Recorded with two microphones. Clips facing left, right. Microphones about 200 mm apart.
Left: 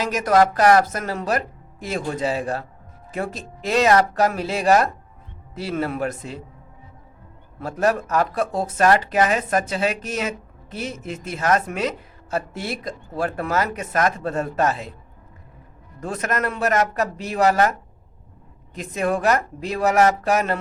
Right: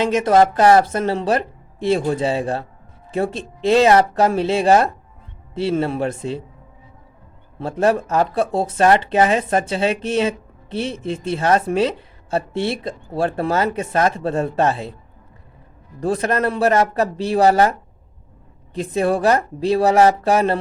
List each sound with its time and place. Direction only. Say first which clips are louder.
0.0 s speech: right 3 dB; 25° right (ahead or behind)
7.6 s speech: right 3 dB; 30° right (ahead or behind)
16.0 s speech: right 6 dB; 30° right (ahead or behind)